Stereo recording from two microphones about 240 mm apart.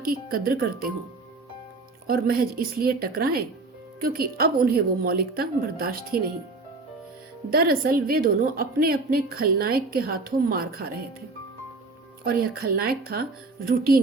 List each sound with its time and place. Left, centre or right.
0.0 s a woman's voice: right
2.0 s a woman's voice: right
7.5 s a woman's voice: right
12.2 s a woman's voice: right